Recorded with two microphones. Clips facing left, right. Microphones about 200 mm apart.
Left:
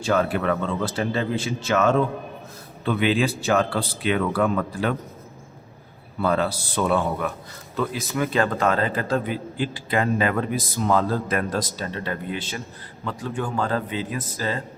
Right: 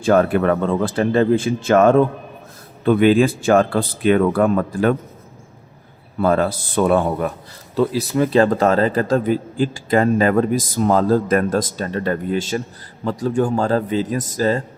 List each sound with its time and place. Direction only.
0.0 s a man's voice: 50° right (ahead or behind)
6.2 s a man's voice: 45° right (ahead or behind)
7.8 s a man's voice: 35° right (ahead or behind)